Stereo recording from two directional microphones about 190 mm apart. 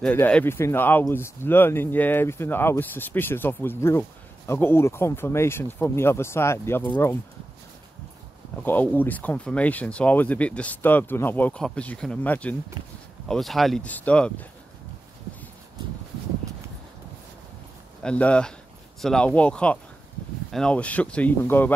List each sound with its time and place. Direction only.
0.0 s speech: 5° left (ahead or behind)
8.6 s speech: 10° left (ahead or behind)
12.8 s speech: 20° right (ahead or behind)
13.3 s speech: centre (ahead or behind)
18.0 s speech: 5° left (ahead or behind)